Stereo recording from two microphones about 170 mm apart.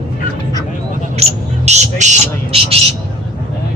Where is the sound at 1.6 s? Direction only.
45° right (ahead or behind).